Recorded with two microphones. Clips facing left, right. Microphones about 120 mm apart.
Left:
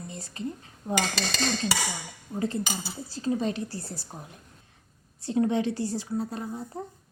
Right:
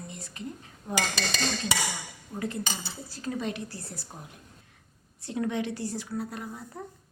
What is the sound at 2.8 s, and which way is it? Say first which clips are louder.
Speech: left 5 dB; 30° left (ahead or behind).